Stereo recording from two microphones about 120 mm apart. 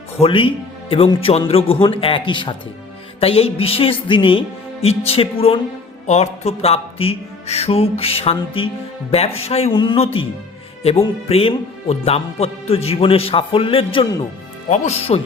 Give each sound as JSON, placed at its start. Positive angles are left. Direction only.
{"t": 0.2, "sound": "speech", "side_deg": 45}
{"t": 3.2, "sound": "speech", "side_deg": 55}
{"t": 6.1, "sound": "music", "side_deg": 65}
{"t": 9.7, "sound": "speech", "side_deg": 45}
{"t": 11.3, "sound": "speech", "side_deg": 55}
{"t": 14.7, "sound": "music", "side_deg": 60}